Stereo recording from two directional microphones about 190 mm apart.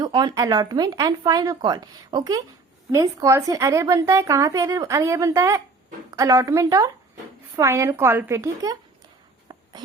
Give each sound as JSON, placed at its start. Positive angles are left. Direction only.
{"t": 0.0, "sound": "a woman's voice", "side_deg": -20}
{"t": 9.5, "sound": "insect", "side_deg": -20}